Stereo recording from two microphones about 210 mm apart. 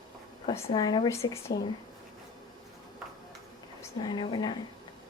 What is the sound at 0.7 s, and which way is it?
Speech, 20° left (ahead or behind).